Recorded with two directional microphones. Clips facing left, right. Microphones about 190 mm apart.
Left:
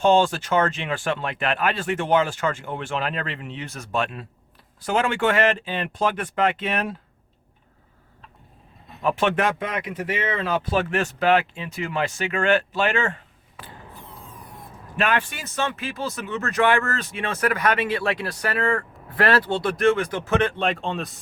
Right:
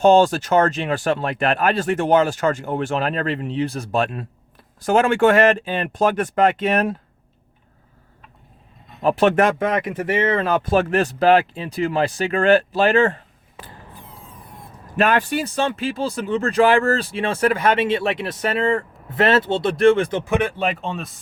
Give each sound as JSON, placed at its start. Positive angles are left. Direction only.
{"t": 0.0, "sound": "speech", "side_deg": -40}
{"t": 9.0, "sound": "speech", "side_deg": -35}
{"t": 14.9, "sound": "speech", "side_deg": -40}